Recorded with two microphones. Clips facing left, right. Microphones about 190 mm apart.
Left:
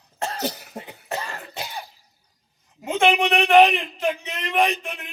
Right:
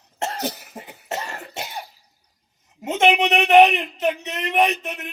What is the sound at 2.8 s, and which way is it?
Speech, 20° right (ahead or behind).